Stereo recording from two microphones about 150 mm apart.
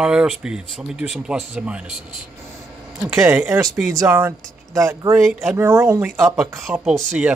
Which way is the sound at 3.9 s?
15° right (ahead or behind).